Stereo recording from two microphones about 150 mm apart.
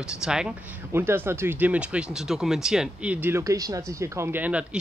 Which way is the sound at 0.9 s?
15° right (ahead or behind).